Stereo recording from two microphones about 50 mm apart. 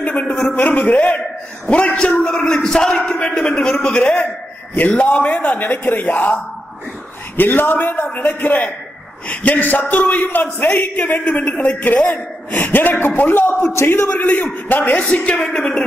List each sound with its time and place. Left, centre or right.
0.0 s a sound: left
0.5 s a man's voice: left
4.7 s a man's voice: left
11.8 s a man's voice: left
13.7 s speech: left
14.0 s a man's voice: left